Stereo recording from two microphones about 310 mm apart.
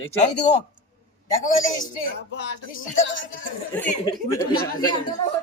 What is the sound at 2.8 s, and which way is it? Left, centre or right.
Speech, left.